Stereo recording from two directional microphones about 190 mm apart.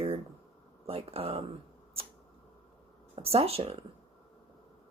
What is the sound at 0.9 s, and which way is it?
Speech, 30° right (ahead or behind).